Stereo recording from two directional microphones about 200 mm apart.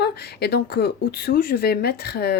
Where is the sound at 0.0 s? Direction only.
55° left (ahead or behind).